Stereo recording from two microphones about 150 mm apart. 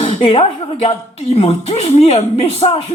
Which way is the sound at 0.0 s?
40° left (ahead or behind).